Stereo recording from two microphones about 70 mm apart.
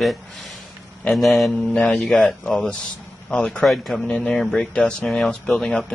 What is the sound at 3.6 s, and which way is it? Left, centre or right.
Speech, centre.